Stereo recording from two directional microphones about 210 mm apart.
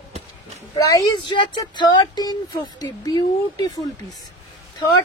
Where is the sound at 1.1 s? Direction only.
20° left (ahead or behind).